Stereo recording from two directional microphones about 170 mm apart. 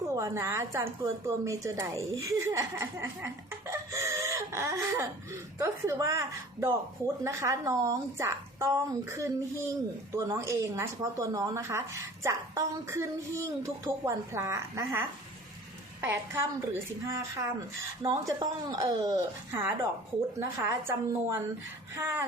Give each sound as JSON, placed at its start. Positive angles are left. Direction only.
{"t": 0.2, "sound": "speech", "side_deg": -15}
{"t": 2.2, "sound": "a sound", "side_deg": -15}
{"t": 5.5, "sound": "speech", "side_deg": -15}